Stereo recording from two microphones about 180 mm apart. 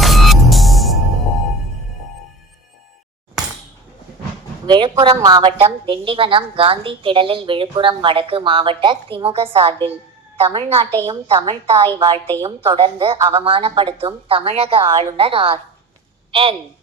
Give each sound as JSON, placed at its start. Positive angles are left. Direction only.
{"t": 0.0, "sound": "music", "side_deg": 0}
{"t": 4.6, "sound": "a woman's voice", "side_deg": -25}